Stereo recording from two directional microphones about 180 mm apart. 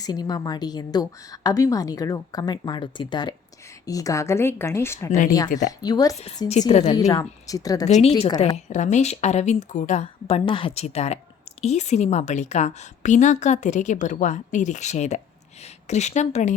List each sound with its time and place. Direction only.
0.0 s a woman's voice: 20° left (ahead or behind)
6.1 s a woman's voice: 35° left (ahead or behind)
6.9 s a woman's voice: 20° left (ahead or behind)
7.9 s a woman's voice: 40° left (ahead or behind)